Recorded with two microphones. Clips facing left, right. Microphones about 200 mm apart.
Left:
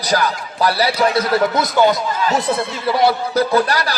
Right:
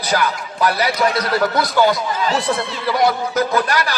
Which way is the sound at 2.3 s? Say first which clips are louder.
Left 1 dB; 45° left (ahead or behind).